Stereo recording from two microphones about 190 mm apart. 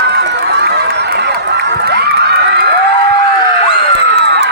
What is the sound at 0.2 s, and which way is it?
Crowd, 60° right (ahead or behind).